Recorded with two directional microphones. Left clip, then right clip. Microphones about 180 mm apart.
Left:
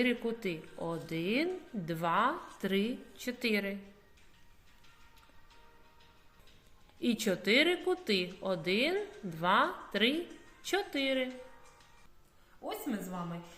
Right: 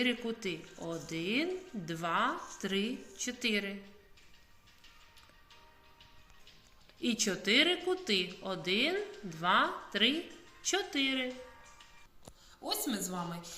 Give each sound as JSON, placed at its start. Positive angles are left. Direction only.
{"t": 0.0, "sound": "a woman's voice", "side_deg": 65}
{"t": 7.0, "sound": "a woman's voice", "side_deg": 60}
{"t": 12.6, "sound": "a woman's voice", "side_deg": 35}